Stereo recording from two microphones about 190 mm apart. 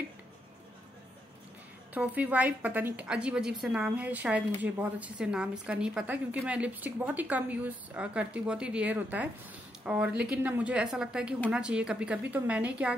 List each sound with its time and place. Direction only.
2.0 s a woman's voice: 10° right (ahead or behind)